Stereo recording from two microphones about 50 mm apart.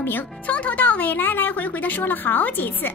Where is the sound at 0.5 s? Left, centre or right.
Left.